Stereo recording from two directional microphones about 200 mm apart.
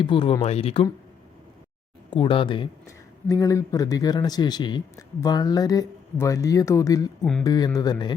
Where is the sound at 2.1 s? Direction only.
25° left (ahead or behind).